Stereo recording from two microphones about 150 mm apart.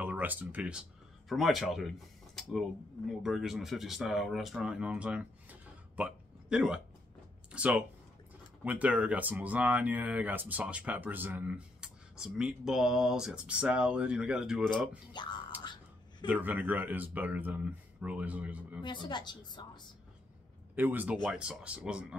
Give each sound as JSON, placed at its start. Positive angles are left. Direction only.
{"t": 0.0, "sound": "speech", "side_deg": -10}
{"t": 15.1, "sound": "speech", "side_deg": 30}
{"t": 15.6, "sound": "a sound", "side_deg": 30}
{"t": 16.3, "sound": "speech", "side_deg": -10}
{"t": 18.8, "sound": "a woman's voice", "side_deg": 30}
{"t": 20.7, "sound": "speech", "side_deg": -10}